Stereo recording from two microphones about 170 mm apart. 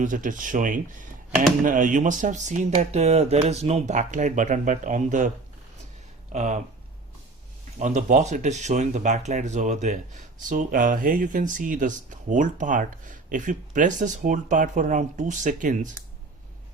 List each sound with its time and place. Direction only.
0.0 s speech: 50° right (ahead or behind)
6.3 s speech: 45° right (ahead or behind)
7.8 s speech: 45° right (ahead or behind)